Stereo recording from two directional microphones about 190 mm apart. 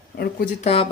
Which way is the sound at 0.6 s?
30° left (ahead or behind).